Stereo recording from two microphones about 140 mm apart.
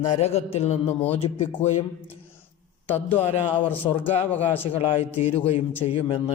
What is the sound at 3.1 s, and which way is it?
A man's voice, 45° left (ahead or behind).